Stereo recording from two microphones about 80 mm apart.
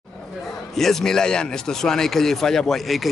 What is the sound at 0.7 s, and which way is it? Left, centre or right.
A man's voice, centre.